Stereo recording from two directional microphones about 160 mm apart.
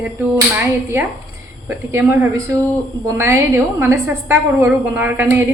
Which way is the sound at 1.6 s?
15° right (ahead or behind).